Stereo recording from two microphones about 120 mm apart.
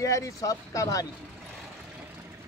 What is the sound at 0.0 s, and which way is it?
Speech, 25° left (ahead or behind).